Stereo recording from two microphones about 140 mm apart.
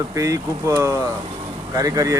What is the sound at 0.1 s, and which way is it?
Speech, 20° right (ahead or behind).